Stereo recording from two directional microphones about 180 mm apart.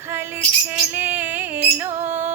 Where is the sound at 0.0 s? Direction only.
15° right (ahead or behind).